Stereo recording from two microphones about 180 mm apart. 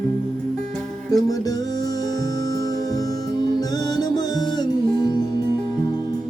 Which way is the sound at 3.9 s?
20° left (ahead or behind).